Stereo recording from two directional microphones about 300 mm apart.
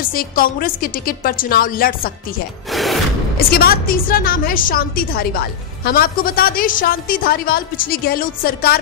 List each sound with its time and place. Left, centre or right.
0.1 s a woman's voice: left
2.7 s a sound: centre
3.3 s a woman's voice: left